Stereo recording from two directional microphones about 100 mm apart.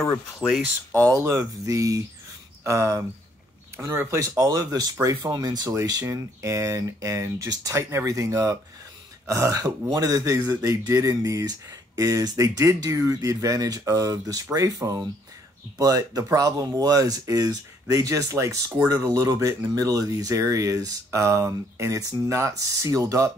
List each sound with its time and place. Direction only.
0.4 s speech: 5° left (ahead or behind)
1.1 s speech: 30° right (ahead or behind)
4.2 s speech: 40° right (ahead or behind)